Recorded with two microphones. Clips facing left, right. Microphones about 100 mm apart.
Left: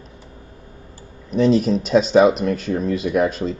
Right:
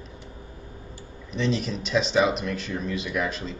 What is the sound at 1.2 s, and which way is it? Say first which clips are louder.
Speech: left 11 dB; 45° left (ahead or behind).